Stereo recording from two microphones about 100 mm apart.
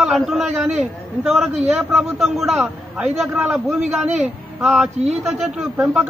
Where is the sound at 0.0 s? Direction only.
5° right (ahead or behind).